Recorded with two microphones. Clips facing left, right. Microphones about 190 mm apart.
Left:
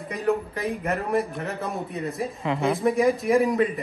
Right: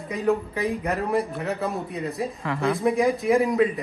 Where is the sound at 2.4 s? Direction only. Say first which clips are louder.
Left 2 dB; 15° left (ahead or behind).